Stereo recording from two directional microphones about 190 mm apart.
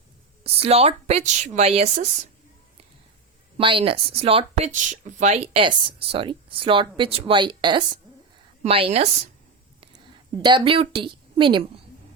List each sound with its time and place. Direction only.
0.4 s a woman's voice: 30° right (ahead or behind)
3.6 s a woman's voice: 30° right (ahead or behind)
10.4 s speech: 25° right (ahead or behind)